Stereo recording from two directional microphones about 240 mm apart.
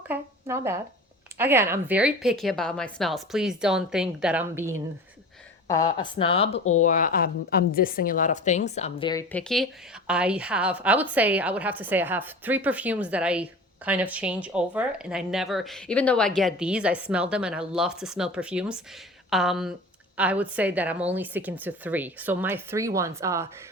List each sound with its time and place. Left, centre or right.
0.1 s a woman's voice: centre
5.6 s a woman's voice: centre
9.3 s a woman's voice: centre